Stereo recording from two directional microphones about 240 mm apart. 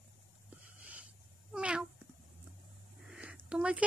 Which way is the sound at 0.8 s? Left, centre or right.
Centre.